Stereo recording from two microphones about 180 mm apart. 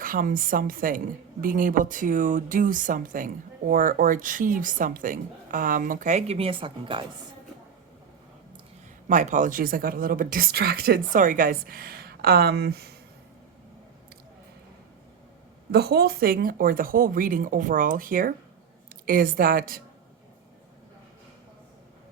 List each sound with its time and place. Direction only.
0.0 s a woman's voice: 50° right (ahead or behind); by 7.0 s 30° right (ahead or behind)
9.0 s a woman's voice: 45° right (ahead or behind); by 12.9 s 65° right (ahead or behind)
15.7 s a woman's voice: 65° right (ahead or behind)